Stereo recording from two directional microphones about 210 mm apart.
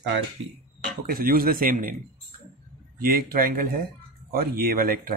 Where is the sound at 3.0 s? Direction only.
45° right (ahead or behind).